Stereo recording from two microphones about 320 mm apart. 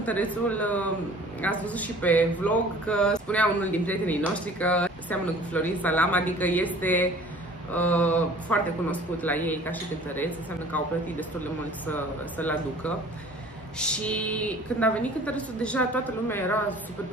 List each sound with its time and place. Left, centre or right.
0.0 s speech: centre